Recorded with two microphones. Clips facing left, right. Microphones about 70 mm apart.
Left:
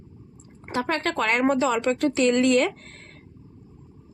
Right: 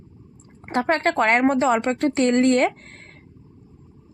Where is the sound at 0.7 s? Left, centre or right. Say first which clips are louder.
Right 5 dB; right.